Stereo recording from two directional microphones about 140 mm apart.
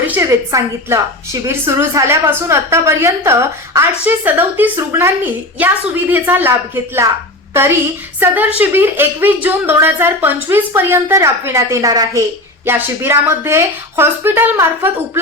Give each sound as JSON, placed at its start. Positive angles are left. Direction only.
{"t": 0.0, "sound": "a woman's voice", "side_deg": -15}